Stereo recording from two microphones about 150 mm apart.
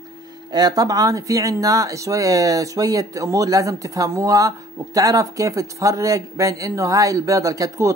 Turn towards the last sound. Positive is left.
turn(degrees=-20)  # may be behind; listen again after turning